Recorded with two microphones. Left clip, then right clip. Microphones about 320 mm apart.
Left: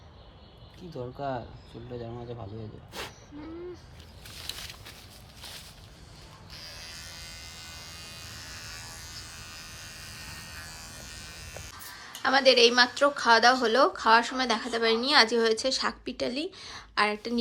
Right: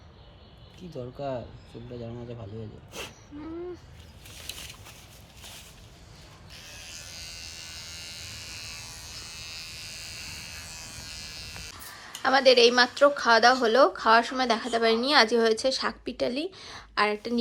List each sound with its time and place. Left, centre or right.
0.9 s speech: centre
6.7 s electric shaver: left
9.8 s electric shaver: centre
11.2 s speech: centre